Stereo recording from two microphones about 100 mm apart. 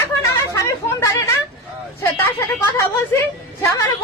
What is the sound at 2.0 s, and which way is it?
Speech, 30° left (ahead or behind).